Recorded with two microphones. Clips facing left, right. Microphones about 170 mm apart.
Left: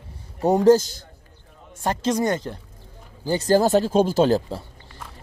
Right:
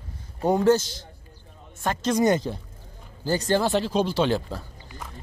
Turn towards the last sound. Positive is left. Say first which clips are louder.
# left 5 dB
turn(degrees=40)  # may be behind; listen again after turning